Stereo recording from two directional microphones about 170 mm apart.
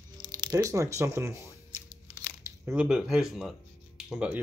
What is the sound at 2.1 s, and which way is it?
Crumpling, 15° right (ahead or behind).